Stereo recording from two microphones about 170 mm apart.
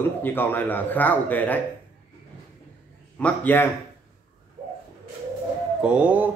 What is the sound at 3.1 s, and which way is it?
Speech, 10° left (ahead or behind).